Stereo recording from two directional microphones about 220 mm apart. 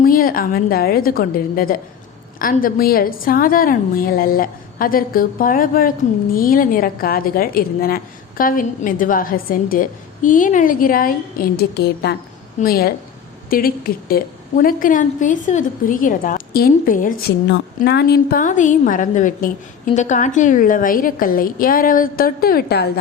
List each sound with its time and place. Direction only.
0.0 s a woman's voice: 40° left (ahead or behind)
17.5 s a woman's voice: 50° left (ahead or behind)